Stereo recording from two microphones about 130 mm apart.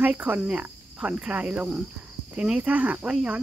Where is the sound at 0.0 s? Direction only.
10° right (ahead or behind).